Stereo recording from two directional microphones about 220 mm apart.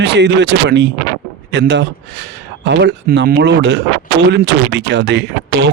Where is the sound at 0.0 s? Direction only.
50° right (ahead or behind).